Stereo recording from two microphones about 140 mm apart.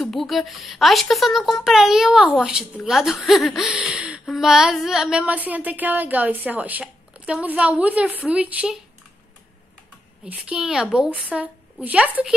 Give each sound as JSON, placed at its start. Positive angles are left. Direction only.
{"t": 0.0, "sound": "a woman's voice", "side_deg": 0}
{"t": 10.2, "sound": "a woman's voice", "side_deg": -10}